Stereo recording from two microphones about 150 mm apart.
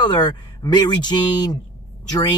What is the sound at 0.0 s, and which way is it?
Speech, 30° left (ahead or behind).